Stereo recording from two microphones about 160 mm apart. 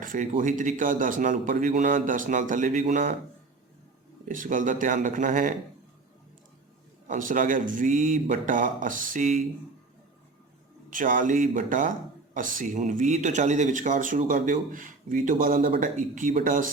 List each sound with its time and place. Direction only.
0.0 s speech: 55° right (ahead or behind)
4.3 s speech: 55° right (ahead or behind)
7.1 s speech: 55° right (ahead or behind)
10.8 s speech: 55° right (ahead or behind)